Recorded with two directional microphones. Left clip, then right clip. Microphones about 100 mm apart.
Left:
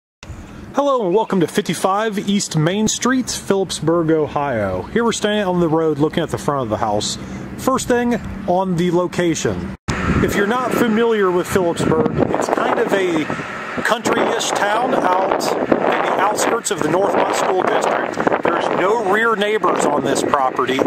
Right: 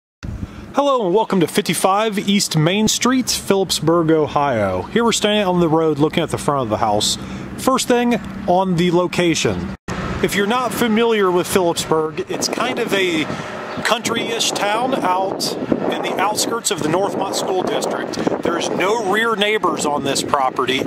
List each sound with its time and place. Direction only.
0.7 s speech: 10° right (ahead or behind)
3.9 s speech: 25° right (ahead or behind)
4.9 s speech: 15° right (ahead or behind)
12.9 s speech: 15° right (ahead or behind)
15.7 s speech: 50° left (ahead or behind)
16.2 s speech: 15° right (ahead or behind)
18.2 s speech: 45° left (ahead or behind)
18.8 s speech: 20° right (ahead or behind)